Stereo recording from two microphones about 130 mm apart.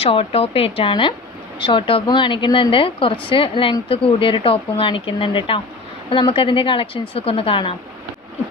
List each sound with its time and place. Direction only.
0.0 s speech: 50° left (ahead or behind)